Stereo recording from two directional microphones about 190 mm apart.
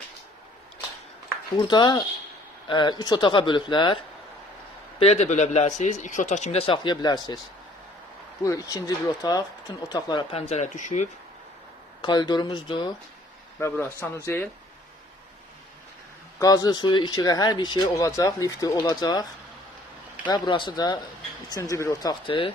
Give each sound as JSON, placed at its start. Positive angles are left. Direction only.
{"t": 1.5, "sound": "speech", "side_deg": 25}
{"t": 4.9, "sound": "speech", "side_deg": 35}
{"t": 8.4, "sound": "speech", "side_deg": 15}
{"t": 10.5, "sound": "speech", "side_deg": 40}
{"t": 12.0, "sound": "speech", "side_deg": 20}
{"t": 13.6, "sound": "speech", "side_deg": 10}
{"t": 16.4, "sound": "speech", "side_deg": 20}
{"t": 20.3, "sound": "speech", "side_deg": 25}